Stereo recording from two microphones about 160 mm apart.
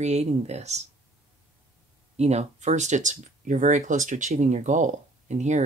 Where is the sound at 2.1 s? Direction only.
45° right (ahead or behind).